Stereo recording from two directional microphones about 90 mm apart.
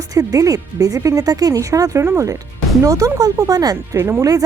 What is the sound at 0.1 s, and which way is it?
Speech, 40° right (ahead or behind).